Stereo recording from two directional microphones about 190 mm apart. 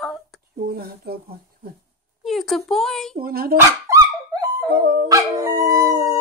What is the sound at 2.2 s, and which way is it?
Speech, centre (ahead or behind).